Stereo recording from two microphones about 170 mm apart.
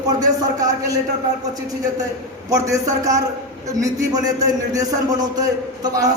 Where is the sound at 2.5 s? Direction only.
20° right (ahead or behind).